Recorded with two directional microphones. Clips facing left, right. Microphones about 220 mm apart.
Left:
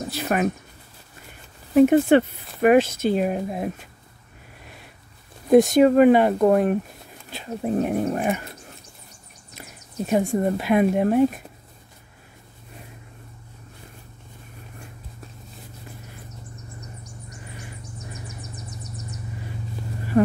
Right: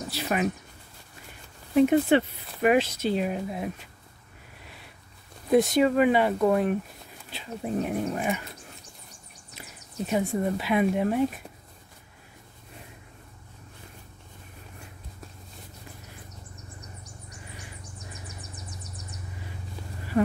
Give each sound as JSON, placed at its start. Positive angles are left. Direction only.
{"t": 0.1, "sound": "speech", "side_deg": 50}
{"t": 1.8, "sound": "speech", "side_deg": 50}
{"t": 5.5, "sound": "speech", "side_deg": 45}
{"t": 9.6, "sound": "speech", "side_deg": 50}
{"t": 20.1, "sound": "insect", "side_deg": 40}